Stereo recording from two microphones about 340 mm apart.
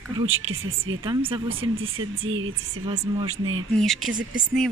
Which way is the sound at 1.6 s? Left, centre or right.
Right.